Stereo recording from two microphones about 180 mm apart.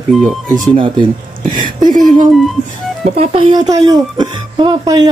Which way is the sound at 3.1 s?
30° right (ahead or behind).